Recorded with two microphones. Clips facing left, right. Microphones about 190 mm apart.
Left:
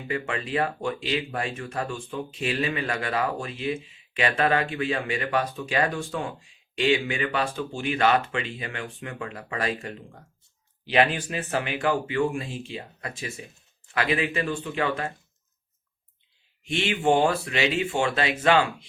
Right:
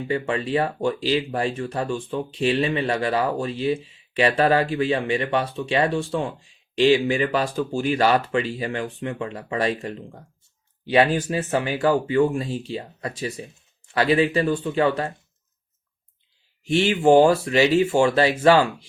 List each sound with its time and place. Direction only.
0.1 s speech: 30° right (ahead or behind)
16.6 s speech: 35° right (ahead or behind)